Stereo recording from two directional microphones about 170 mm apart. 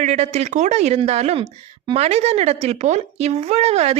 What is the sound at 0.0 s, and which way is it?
Speech, 40° right (ahead or behind).